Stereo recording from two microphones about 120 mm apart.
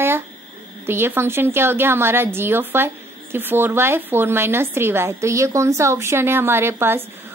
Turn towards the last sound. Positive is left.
turn(degrees=-20)  # may be behind; listen again after turning